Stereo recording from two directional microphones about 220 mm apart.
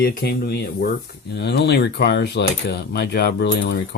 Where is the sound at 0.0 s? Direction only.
45° left (ahead or behind).